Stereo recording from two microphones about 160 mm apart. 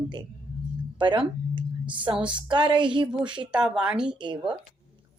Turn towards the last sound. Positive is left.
turn(degrees=-30)  # may be behind; listen again after turning